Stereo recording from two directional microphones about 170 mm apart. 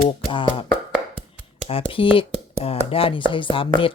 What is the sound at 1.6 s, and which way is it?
Speech, 30° left (ahead or behind).